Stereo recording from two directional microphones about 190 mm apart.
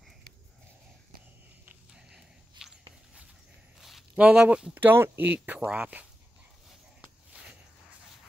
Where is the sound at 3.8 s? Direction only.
Centre (ahead or behind).